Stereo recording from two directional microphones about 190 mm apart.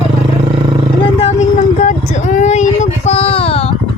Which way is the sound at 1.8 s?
40° left (ahead or behind).